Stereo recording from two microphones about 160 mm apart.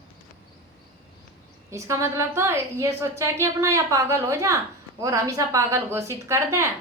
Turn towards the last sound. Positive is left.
turn(degrees=-15)  # may be behind; listen again after turning